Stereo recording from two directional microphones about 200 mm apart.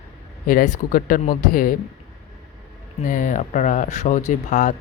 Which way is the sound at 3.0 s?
40° left (ahead or behind).